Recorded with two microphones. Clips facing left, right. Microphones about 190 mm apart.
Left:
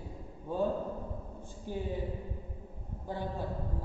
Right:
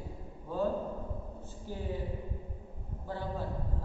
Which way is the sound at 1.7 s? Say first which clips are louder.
Left 4 dB; 20° left (ahead or behind).